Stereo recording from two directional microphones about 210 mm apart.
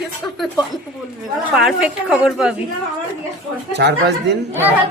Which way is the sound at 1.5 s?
Centre (ahead or behind).